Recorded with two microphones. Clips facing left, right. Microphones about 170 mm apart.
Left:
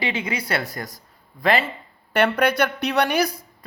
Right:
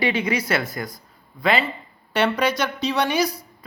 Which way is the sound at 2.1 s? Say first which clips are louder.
Left 1 dB; 55° left (ahead or behind).